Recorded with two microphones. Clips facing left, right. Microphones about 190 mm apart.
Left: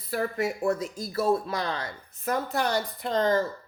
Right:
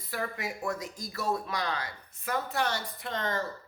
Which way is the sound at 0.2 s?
30° left (ahead or behind).